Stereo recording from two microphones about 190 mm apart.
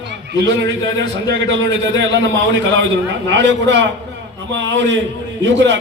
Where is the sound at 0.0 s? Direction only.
70° right (ahead or behind).